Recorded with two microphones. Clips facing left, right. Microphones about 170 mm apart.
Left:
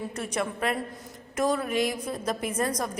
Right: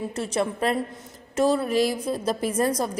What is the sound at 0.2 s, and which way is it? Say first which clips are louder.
A woman's voice: right 5 dB; 30° right (ahead or behind).